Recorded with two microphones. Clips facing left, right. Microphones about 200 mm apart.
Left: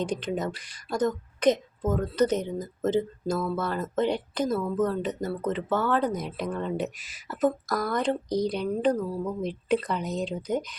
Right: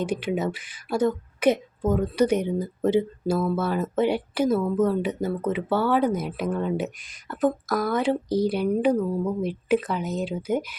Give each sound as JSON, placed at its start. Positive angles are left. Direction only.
{"t": 0.0, "sound": "speech", "side_deg": -10}